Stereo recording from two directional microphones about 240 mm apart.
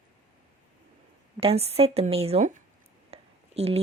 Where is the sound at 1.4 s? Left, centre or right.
Right.